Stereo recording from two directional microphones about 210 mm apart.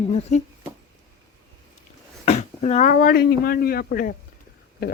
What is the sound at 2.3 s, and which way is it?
Speech, 35° left (ahead or behind).